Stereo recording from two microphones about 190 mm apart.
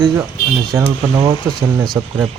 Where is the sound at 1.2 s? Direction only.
20° right (ahead or behind).